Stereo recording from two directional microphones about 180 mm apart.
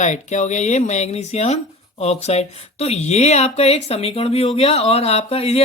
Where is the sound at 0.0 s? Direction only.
40° left (ahead or behind).